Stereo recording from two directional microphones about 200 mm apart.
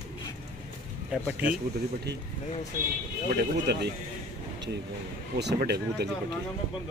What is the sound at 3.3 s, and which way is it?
Speech, 55° right (ahead or behind).